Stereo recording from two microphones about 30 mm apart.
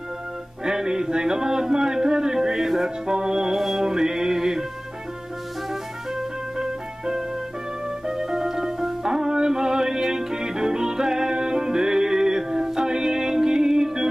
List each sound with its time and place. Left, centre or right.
0.7 s a sound: right
3.5 s music: centre
3.8 s music: right
5.7 s music: centre